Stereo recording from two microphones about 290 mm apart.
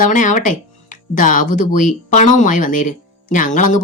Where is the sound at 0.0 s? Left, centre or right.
Left.